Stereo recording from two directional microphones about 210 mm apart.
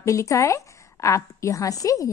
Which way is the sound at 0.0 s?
15° left (ahead or behind).